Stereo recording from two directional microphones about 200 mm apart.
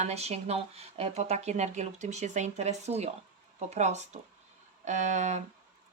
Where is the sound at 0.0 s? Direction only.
30° right (ahead or behind).